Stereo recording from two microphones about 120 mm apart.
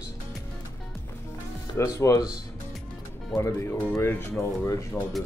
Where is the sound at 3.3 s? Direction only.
25° left (ahead or behind).